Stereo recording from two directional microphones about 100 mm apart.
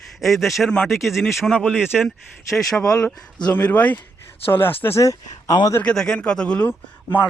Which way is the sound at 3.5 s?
15° left (ahead or behind).